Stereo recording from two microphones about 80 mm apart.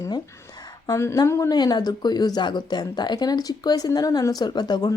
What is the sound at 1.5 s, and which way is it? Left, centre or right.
A woman's voice, left.